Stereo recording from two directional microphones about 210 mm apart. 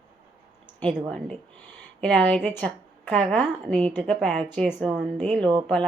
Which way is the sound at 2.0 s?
5° left (ahead or behind).